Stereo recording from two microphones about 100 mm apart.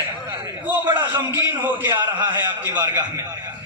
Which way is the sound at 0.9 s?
50° right (ahead or behind).